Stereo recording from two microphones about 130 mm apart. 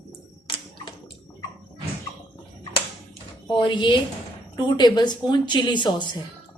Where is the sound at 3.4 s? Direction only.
35° left (ahead or behind).